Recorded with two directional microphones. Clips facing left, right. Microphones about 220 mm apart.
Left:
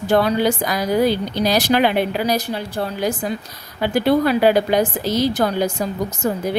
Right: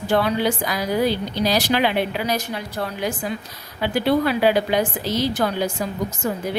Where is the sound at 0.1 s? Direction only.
40° left (ahead or behind).